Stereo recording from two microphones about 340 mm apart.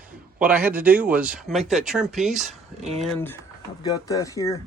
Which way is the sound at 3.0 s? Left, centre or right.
Centre.